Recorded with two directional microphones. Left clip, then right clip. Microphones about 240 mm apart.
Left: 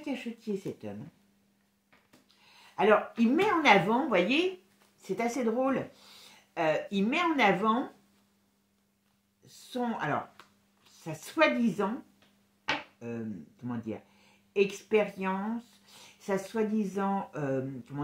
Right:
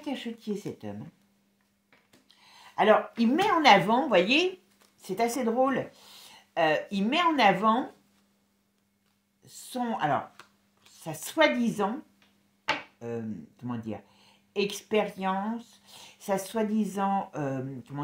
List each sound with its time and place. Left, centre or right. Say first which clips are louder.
0.0 s speech: right 2 dB; right
2.2 s a woman's voice: right 5 dB; right
9.7 s speech: right 4 dB; right
13.0 s speech: right 4 dB; right